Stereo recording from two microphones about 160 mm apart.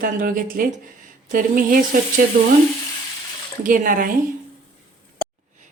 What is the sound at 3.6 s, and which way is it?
Speech, 55° right (ahead or behind).